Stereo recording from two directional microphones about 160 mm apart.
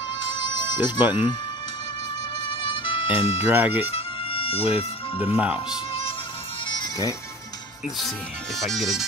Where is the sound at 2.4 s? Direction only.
30° left (ahead or behind).